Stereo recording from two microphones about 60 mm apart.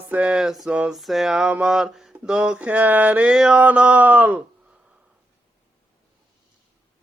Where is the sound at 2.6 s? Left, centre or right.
Right.